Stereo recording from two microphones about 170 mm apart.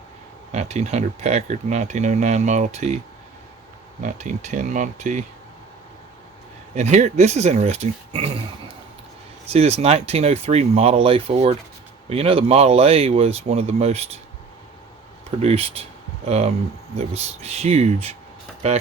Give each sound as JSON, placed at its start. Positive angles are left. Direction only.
{"t": 0.5, "sound": "speech", "side_deg": -40}
{"t": 4.0, "sound": "speech", "side_deg": -45}
{"t": 6.7, "sound": "speech", "side_deg": -40}
{"t": 15.4, "sound": "speech", "side_deg": -35}